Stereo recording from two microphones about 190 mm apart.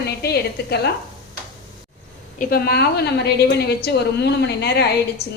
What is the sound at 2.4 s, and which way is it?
A woman's voice, 50° left (ahead or behind).